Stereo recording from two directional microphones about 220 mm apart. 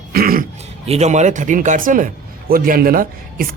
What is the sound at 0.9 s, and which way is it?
Speech, 30° right (ahead or behind).